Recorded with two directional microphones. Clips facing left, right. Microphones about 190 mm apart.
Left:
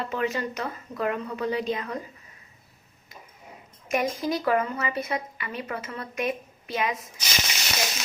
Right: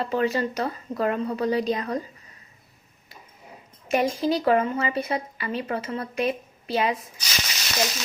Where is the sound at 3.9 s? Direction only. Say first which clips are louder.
Right 3 dB; 30° right (ahead or behind).